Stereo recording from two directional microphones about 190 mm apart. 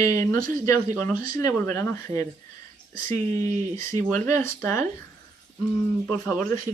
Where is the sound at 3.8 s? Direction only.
15° left (ahead or behind).